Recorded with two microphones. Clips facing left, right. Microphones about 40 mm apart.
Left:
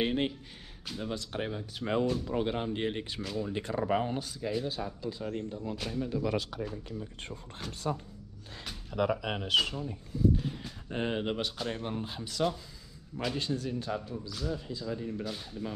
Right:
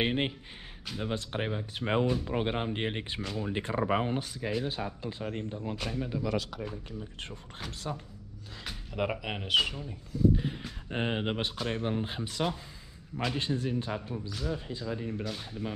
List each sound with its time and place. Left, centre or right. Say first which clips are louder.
0.0 s speech: even; right
4.6 s speech: even; right
7.6 s speech: right 1 dB; centre
8.9 s speech: left 3 dB; right
9.2 s speech: right 1 dB; centre